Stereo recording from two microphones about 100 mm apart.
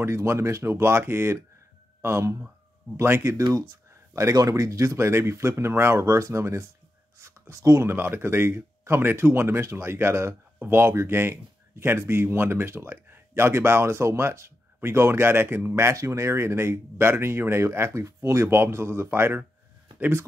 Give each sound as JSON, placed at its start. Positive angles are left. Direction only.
{"t": 0.0, "sound": "speech", "side_deg": -25}